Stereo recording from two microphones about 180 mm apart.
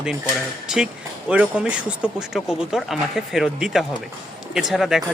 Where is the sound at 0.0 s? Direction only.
5° right (ahead or behind).